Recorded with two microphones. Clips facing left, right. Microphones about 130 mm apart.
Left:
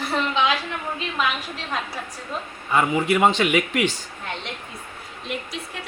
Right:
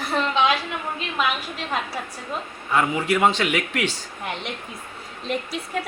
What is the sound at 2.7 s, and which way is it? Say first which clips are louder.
Speech: left 1 dB; 5° left (ahead or behind).